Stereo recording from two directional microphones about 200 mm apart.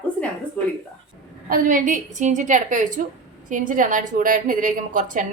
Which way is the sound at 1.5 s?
45° right (ahead or behind).